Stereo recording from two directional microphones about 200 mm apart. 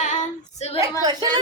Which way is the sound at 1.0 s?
20° right (ahead or behind).